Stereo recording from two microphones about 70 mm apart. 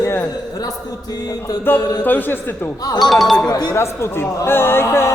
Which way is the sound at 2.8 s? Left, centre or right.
Left.